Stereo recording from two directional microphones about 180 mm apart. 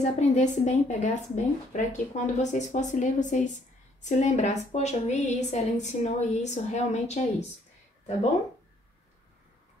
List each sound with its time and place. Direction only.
0.0 s a woman's voice: 40° left (ahead or behind)